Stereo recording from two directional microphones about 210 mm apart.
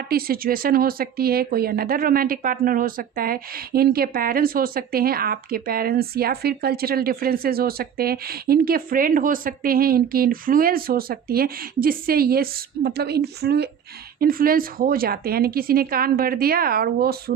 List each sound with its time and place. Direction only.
0.1 s speech: 45° right (ahead or behind)